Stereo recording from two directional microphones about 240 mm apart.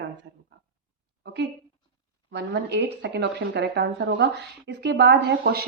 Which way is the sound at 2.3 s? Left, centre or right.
Right.